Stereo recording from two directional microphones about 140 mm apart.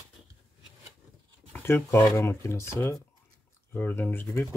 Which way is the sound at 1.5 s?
15° left (ahead or behind).